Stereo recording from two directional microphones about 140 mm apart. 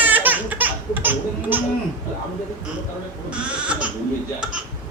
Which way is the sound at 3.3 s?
10° right (ahead or behind).